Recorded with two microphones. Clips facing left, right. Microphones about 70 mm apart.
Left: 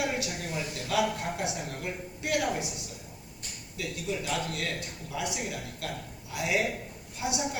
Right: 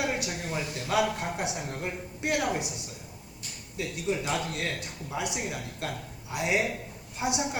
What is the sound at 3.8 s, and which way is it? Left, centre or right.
Speech, right.